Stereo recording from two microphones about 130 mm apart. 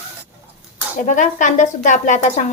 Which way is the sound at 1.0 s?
75° left (ahead or behind).